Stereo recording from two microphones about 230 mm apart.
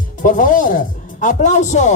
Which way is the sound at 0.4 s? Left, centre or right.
Left.